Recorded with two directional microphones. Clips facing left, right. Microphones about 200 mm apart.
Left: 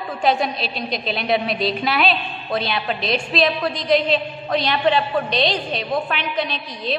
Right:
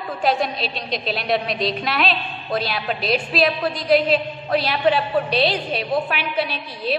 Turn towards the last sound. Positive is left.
turn(degrees=-5)  # may be behind; listen again after turning